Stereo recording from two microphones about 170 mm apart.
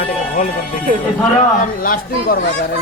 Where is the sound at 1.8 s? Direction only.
55° left (ahead or behind).